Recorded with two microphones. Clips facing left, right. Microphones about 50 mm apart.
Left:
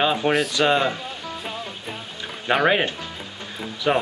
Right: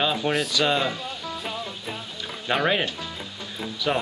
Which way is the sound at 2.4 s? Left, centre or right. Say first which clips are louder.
Left 4 dB; centre.